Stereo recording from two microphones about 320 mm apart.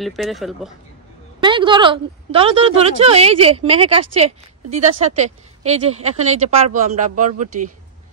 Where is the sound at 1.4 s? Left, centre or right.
Centre.